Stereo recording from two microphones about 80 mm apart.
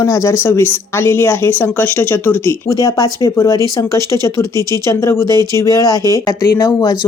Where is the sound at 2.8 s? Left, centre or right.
Left.